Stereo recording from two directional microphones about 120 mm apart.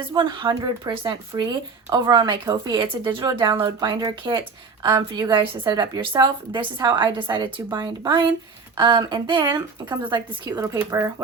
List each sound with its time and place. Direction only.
0.1 s a woman's voice: 40° right (ahead or behind)
10.6 s speech: 25° right (ahead or behind)